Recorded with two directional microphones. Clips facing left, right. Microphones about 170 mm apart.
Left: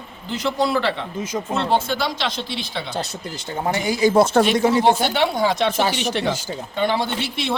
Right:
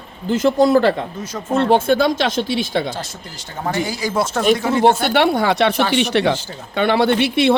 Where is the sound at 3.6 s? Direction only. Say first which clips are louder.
Left 3 dB; 20° left (ahead or behind).